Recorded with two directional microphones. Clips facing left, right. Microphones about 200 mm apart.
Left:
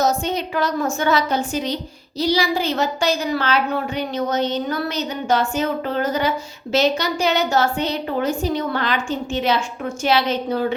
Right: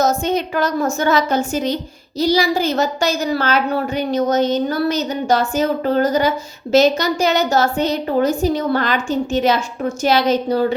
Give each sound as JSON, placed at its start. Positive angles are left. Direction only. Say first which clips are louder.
{"t": 0.0, "sound": "a woman's voice", "louder": "right 3 dB", "side_deg": -45}